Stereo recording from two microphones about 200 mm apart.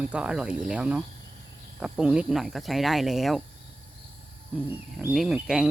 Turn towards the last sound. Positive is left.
turn(degrees=-5)  # may be behind; listen again after turning